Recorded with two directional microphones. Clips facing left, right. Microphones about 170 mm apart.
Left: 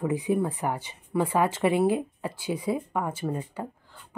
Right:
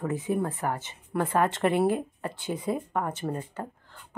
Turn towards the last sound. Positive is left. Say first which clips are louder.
# left 1 dB
turn(degrees=10)  # may be behind; listen again after turning